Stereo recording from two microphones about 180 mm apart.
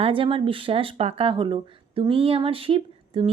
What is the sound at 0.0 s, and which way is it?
Speech, 30° right (ahead or behind).